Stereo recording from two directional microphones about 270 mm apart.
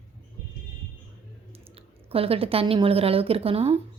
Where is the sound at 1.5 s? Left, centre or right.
Right.